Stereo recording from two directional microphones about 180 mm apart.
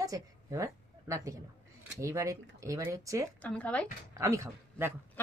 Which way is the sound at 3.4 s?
10° left (ahead or behind).